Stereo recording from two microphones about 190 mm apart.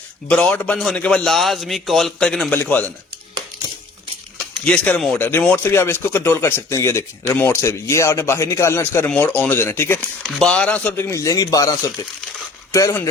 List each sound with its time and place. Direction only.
0.3 s a man's voice: 5° left (ahead or behind)
4.6 s speech: 5° left (ahead or behind)